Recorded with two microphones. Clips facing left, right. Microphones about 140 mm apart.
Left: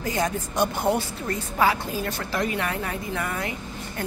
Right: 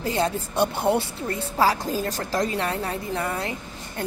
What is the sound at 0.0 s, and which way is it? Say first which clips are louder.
A woman's voice: right 2 dB; 30° right (ahead or behind).